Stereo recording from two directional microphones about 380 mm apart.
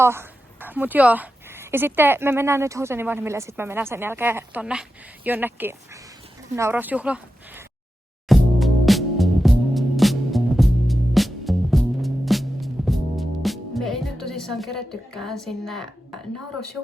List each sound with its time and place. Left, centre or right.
0.0 s speech: centre
8.3 s music: centre
16.8 s speech: centre